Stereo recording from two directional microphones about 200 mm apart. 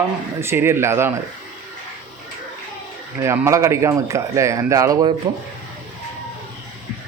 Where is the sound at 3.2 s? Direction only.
15° right (ahead or behind).